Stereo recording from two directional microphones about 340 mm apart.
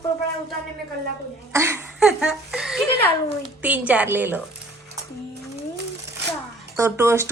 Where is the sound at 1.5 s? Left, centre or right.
Centre.